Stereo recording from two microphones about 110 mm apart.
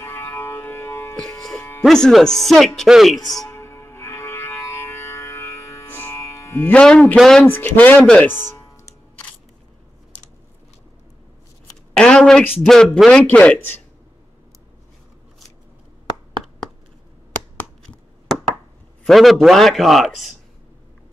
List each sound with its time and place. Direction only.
0.0 s music: 20° left (ahead or behind)
1.8 s speech: 5° left (ahead or behind)
3.4 s music: 25° left (ahead or behind); by 7.2 s 10° left (ahead or behind)
7.2 s speech: 5° left (ahead or behind)
7.4 s speech: 15° left (ahead or behind)
12.0 s a sound: 5° left (ahead or behind)
12.5 s speech: 5° left (ahead or behind)
19.0 s speech: centre (ahead or behind)